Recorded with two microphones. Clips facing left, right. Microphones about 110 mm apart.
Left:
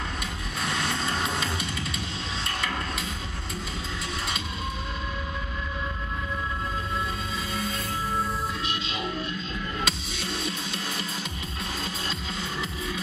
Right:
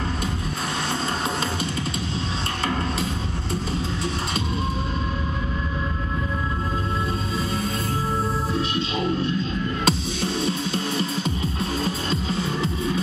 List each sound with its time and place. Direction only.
9.8 s music: 35° right (ahead or behind)